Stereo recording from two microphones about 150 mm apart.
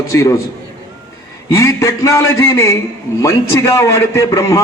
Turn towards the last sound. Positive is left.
turn(degrees=20)  # may be behind; listen again after turning